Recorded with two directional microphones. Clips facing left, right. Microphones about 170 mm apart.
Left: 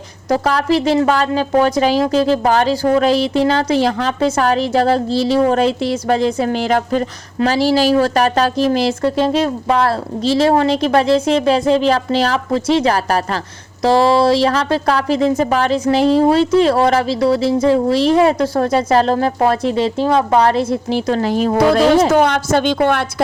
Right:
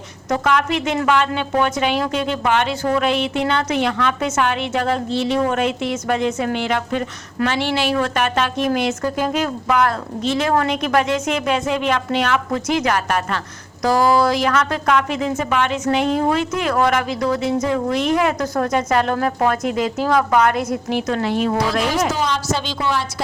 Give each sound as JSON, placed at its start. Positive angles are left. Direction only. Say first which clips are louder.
{"t": 0.3, "sound": "a woman's voice", "louder": "left 4 dB", "side_deg": 35}
{"t": 22.1, "sound": "a woman's voice", "louder": "left 8 dB", "side_deg": 60}